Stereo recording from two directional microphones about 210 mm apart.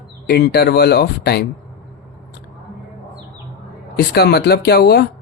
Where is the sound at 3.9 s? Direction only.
50° left (ahead or behind).